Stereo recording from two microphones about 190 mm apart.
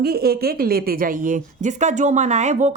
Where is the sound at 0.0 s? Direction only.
55° right (ahead or behind).